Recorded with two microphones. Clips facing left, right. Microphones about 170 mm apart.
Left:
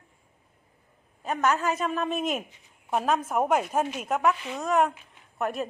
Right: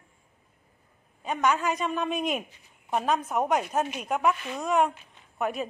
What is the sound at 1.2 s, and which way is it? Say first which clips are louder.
A woman's voice: even; centre (ahead or behind).